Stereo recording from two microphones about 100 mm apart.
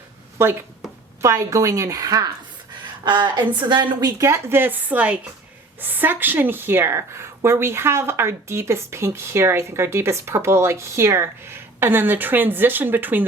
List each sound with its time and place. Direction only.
0.4 s a woman's voice: 25° right (ahead or behind)
3.0 s a woman's voice: 50° right (ahead or behind)
4.0 s a woman's voice: 30° right (ahead or behind)